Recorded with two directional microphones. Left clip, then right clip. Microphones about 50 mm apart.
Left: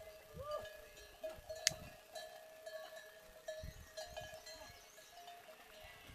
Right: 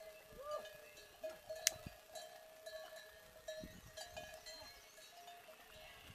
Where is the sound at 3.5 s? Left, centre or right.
Right.